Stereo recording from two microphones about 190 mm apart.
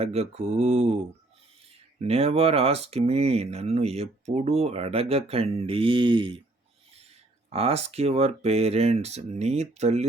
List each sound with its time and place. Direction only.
0.0 s speech: 35° right (ahead or behind)
2.0 s speech: 30° right (ahead or behind)
7.5 s speech: 30° right (ahead or behind)